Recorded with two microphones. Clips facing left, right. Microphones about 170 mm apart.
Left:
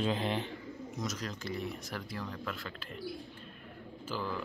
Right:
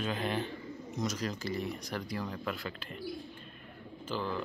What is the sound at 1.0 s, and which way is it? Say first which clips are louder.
Speech: right 5 dB; centre (ahead or behind).